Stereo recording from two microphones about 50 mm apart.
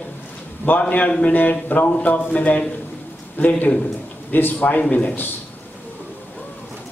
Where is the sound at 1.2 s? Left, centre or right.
Left.